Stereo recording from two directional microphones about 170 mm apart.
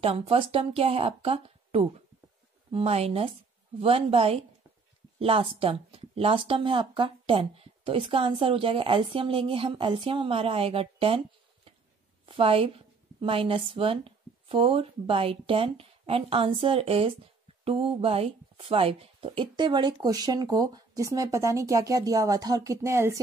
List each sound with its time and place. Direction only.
0.0 s a woman's voice: 35° right (ahead or behind); by 23.2 s 15° right (ahead or behind)